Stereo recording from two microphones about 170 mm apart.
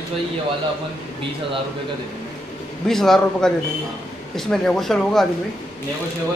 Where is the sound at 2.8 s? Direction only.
Centre (ahead or behind).